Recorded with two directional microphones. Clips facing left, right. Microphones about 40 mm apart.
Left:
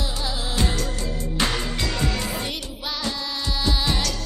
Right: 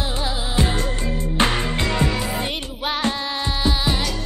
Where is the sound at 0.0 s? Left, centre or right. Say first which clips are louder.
Right 3 dB; right.